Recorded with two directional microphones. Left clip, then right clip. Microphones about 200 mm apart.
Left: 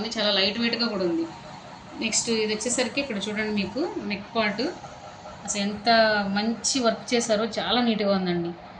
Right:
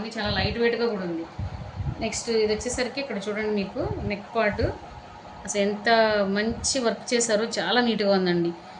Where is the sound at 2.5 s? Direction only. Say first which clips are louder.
Even; 35° right (ahead or behind).